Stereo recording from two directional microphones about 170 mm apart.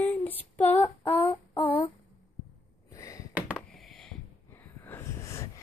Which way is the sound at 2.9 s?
20° left (ahead or behind).